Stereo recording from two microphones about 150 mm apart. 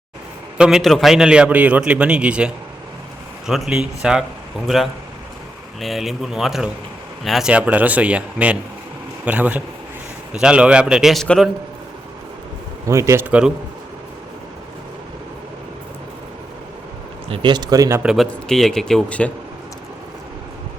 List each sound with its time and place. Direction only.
0.6 s a man's voice: centre (ahead or behind)
12.9 s speech: 20° right (ahead or behind)
17.2 s speech: 35° right (ahead or behind)
18.0 s speech: centre (ahead or behind)